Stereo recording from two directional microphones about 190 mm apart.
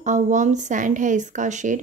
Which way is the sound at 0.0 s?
40° right (ahead or behind).